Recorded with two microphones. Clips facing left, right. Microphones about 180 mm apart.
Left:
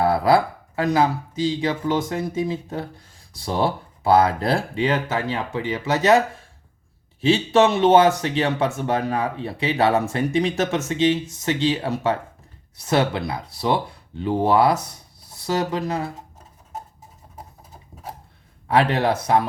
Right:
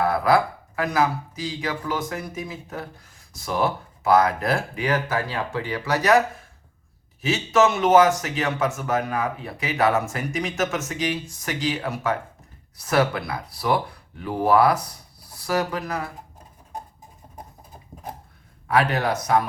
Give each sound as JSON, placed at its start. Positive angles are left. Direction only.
{"t": 0.0, "sound": "speech", "side_deg": 30}
{"t": 18.7, "sound": "speech", "side_deg": 25}